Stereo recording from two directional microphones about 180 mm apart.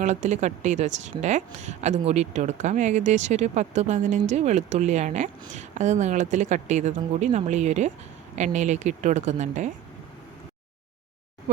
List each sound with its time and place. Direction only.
0.0 s speech: 40° right (ahead or behind)